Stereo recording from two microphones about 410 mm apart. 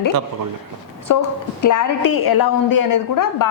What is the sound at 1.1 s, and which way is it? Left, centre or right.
A woman's voice, left.